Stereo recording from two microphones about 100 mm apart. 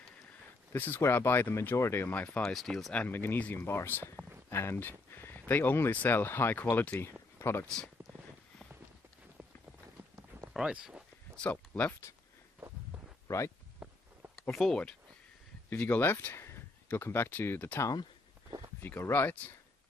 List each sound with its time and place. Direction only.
0.7 s speech: 25° left (ahead or behind)
2.4 s speech: 5° left (ahead or behind)
3.0 s speech: 20° left (ahead or behind)
7.3 s a sound: 25° left (ahead or behind)
10.5 s speech: 10° right (ahead or behind)
11.4 s speech: 15° left (ahead or behind)
13.2 s speech: 30° left (ahead or behind)
13.8 s a sound: 5° right (ahead or behind)
14.5 s speech: 5° left (ahead or behind)
15.8 s speech: 20° left (ahead or behind)
17.7 s speech: 35° left (ahead or behind)
18.8 s speech: 20° left (ahead or behind)